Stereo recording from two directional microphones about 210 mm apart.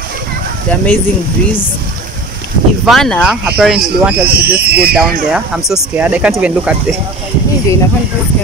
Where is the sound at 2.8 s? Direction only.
Centre (ahead or behind).